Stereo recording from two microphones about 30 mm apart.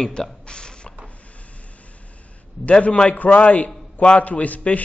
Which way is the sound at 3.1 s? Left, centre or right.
Left.